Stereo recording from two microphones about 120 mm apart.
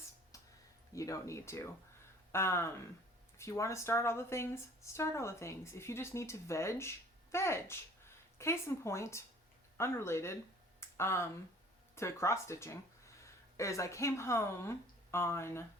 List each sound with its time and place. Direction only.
0.9 s speech: 25° left (ahead or behind)
10.8 s a sound: 20° left (ahead or behind)
11.9 s speech: 25° left (ahead or behind)